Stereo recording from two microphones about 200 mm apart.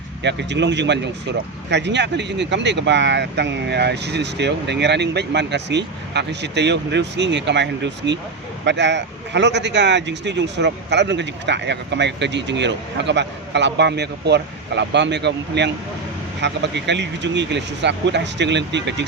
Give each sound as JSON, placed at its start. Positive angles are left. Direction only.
{"t": 0.2, "sound": "speech", "side_deg": -60}